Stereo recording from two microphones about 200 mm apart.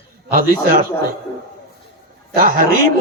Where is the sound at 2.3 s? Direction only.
45° right (ahead or behind).